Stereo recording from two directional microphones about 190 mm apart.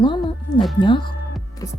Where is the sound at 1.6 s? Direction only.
15° left (ahead or behind).